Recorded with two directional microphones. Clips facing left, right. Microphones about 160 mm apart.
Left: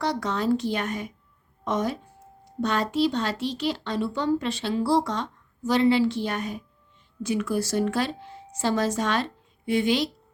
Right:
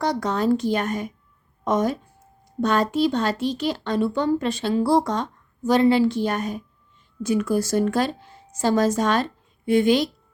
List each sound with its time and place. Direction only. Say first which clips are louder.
0.0 s speech: right 4 dB; 45° right (ahead or behind)